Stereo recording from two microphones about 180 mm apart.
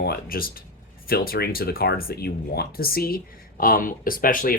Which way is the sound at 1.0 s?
55° left (ahead or behind).